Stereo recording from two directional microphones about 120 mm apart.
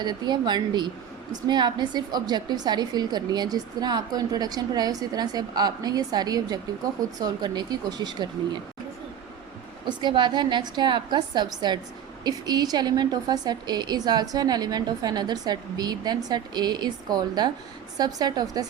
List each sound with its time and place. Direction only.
0.0 s a woman's voice: 35° right (ahead or behind)
9.8 s a woman's voice: 40° right (ahead or behind)